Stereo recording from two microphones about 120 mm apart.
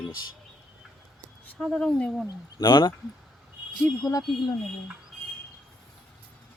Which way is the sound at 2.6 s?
45° left (ahead or behind).